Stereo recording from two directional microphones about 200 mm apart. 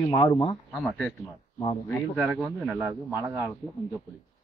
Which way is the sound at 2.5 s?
5° right (ahead or behind).